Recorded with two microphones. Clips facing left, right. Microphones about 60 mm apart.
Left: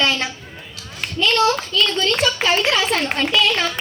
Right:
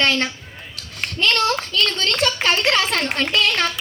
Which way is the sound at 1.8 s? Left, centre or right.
Right.